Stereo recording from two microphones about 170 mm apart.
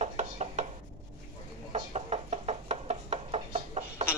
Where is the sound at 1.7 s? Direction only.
40° right (ahead or behind).